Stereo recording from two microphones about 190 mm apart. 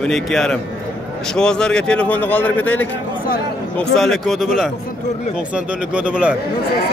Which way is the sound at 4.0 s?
Centre (ahead or behind).